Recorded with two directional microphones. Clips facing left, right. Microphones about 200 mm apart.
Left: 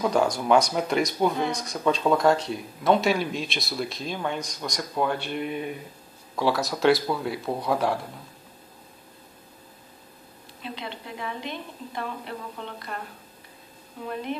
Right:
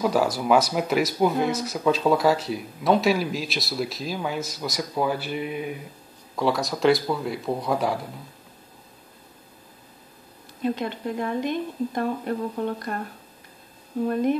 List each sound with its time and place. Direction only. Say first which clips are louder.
0.0 s speech: right 1 dB; 5° right (ahead or behind)
10.6 s speech: right 10 dB; 50° right (ahead or behind)
14.0 s speech: right 10 dB; 45° right (ahead or behind)